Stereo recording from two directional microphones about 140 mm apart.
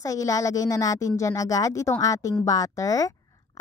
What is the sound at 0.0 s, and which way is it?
Speech, 25° left (ahead or behind).